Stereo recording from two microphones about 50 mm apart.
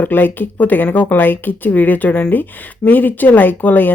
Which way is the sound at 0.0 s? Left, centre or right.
Left.